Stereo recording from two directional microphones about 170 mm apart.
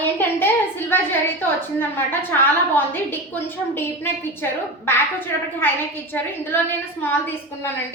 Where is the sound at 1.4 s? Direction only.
10° left (ahead or behind).